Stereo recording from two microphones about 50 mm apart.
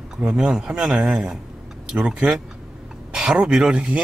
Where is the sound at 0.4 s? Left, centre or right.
Centre.